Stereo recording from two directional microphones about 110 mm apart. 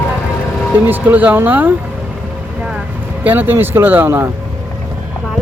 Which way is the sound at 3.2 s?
15° right (ahead or behind).